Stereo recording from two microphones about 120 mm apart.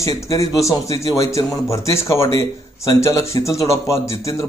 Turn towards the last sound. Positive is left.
turn(degrees=25)  # may be behind; listen again after turning